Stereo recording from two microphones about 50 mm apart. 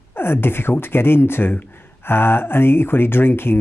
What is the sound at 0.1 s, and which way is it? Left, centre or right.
Speech, left.